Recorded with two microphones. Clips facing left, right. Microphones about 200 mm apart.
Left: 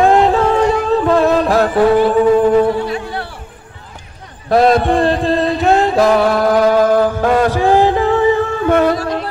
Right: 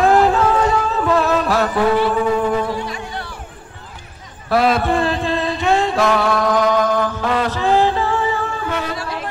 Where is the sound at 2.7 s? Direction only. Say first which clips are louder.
Left 7 dB; 60° left (ahead or behind).